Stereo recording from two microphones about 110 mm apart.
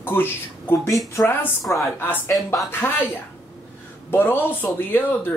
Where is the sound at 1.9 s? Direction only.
20° left (ahead or behind).